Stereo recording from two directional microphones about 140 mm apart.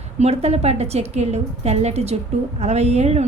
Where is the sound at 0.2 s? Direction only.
50° right (ahead or behind).